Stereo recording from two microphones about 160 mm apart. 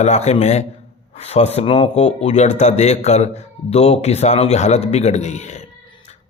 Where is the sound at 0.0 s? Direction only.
45° left (ahead or behind).